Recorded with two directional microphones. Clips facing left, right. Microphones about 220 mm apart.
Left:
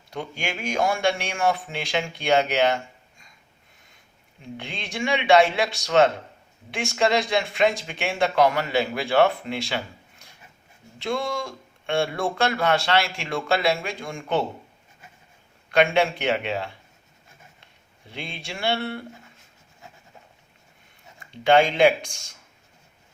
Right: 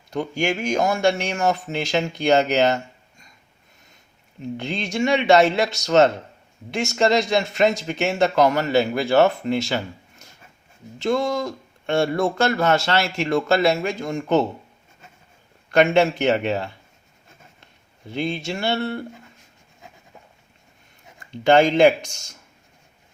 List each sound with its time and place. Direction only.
0.2 s speech: 45° right (ahead or behind)
4.6 s speech: 45° right (ahead or behind)
15.7 s speech: 45° right (ahead or behind)
18.1 s speech: 45° right (ahead or behind)
21.5 s speech: 40° right (ahead or behind)